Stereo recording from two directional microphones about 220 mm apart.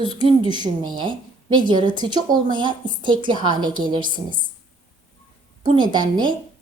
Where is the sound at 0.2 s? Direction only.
20° right (ahead or behind).